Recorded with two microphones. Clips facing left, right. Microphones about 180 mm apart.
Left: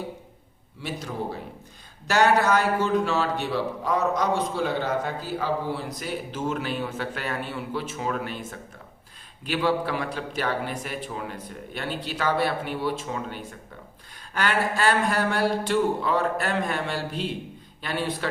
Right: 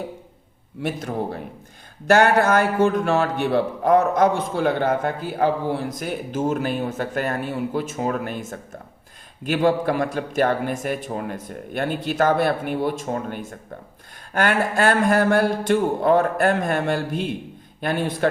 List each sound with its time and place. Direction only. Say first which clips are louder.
0.8 s a man's voice: right 6 dB; 50° right (ahead or behind)